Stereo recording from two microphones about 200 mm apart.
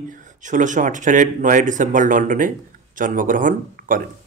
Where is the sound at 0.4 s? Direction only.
40° right (ahead or behind).